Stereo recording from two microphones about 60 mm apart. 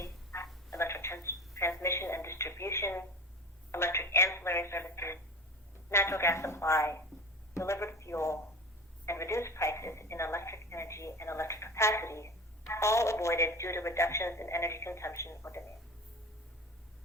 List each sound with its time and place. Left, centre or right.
0.0 s telephone: left
5.9 s a sound: left
9.0 s telephone: left